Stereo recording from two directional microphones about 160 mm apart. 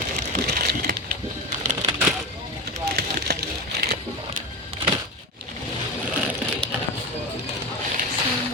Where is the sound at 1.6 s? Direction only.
50° right (ahead or behind).